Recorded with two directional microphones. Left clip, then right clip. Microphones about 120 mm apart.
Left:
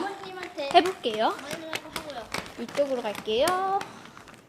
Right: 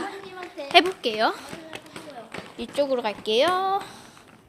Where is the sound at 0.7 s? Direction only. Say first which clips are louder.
Right 3 dB; 15° right (ahead or behind).